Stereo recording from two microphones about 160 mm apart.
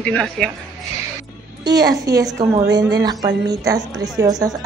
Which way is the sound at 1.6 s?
90° right.